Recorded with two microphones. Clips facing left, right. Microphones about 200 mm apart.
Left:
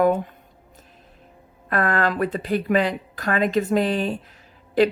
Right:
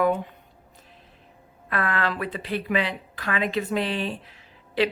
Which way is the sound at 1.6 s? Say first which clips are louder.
Left 5 dB; 45° left (ahead or behind).